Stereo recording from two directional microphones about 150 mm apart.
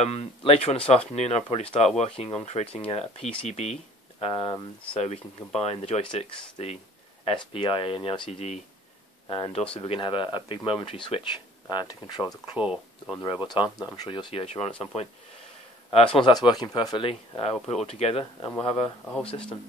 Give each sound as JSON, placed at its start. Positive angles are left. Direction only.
{"t": 0.0, "sound": "speech", "side_deg": 45}
{"t": 4.2, "sound": "speech", "side_deg": 30}
{"t": 4.9, "sound": "speech", "side_deg": 40}
{"t": 12.5, "sound": "speech", "side_deg": -5}
{"t": 13.5, "sound": "speech", "side_deg": 25}
{"t": 16.2, "sound": "speech", "side_deg": 30}
{"t": 19.0, "sound": "speech", "side_deg": 5}